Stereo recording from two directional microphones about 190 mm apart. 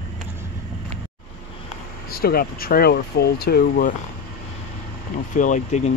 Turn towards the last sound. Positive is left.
turn(degrees=40)  # may be behind; listen again after turning